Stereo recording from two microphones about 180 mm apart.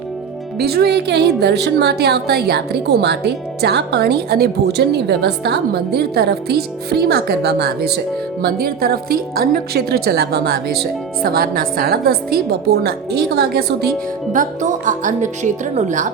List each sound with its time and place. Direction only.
0.6 s a woman's voice: 60° right (ahead or behind)
14.3 s music: 45° right (ahead or behind)